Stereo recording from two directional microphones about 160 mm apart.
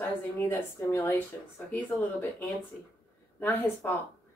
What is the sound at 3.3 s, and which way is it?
Speech, 15° left (ahead or behind).